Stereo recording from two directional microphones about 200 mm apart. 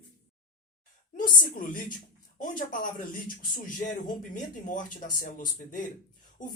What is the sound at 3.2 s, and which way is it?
Speech, 40° left (ahead or behind).